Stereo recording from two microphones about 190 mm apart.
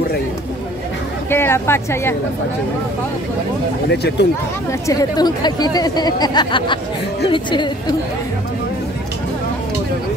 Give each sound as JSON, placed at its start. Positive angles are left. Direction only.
{"t": 1.3, "sound": "a woman's voice", "side_deg": 10}
{"t": 3.9, "sound": "speech", "side_deg": 60}
{"t": 4.8, "sound": "speech", "side_deg": 20}